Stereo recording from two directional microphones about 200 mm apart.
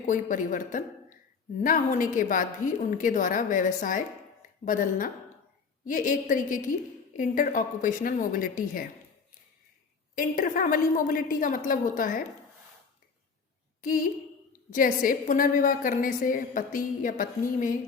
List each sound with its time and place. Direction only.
0.0 s a woman's voice: 40° left (ahead or behind)
10.2 s a woman's voice: 40° left (ahead or behind)
13.8 s a woman's voice: 45° left (ahead or behind)